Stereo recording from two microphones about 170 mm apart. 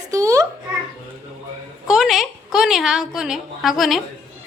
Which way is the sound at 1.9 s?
Centre (ahead or behind).